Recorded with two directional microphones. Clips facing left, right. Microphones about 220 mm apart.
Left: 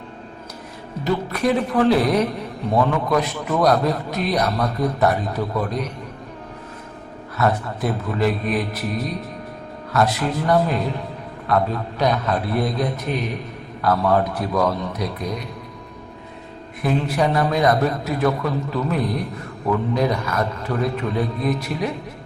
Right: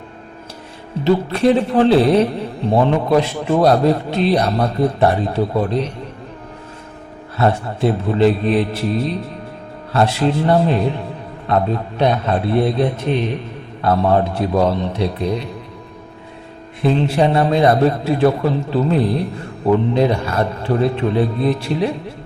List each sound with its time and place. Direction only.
1.0 s a man's voice: 30° right (ahead or behind)
7.3 s a man's voice: 30° right (ahead or behind)
16.8 s a man's voice: 25° right (ahead or behind)